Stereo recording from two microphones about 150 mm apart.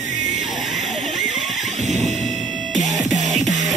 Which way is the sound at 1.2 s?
55° right (ahead or behind).